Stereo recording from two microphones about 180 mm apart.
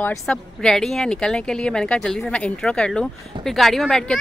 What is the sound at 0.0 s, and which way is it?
Speech, 5° left (ahead or behind).